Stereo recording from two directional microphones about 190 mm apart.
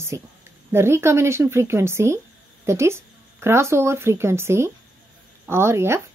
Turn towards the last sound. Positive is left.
turn(degrees=-15)  # may be behind; listen again after turning